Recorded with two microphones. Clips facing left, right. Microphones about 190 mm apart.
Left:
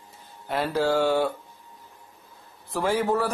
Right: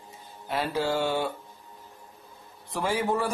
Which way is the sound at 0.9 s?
10° left (ahead or behind).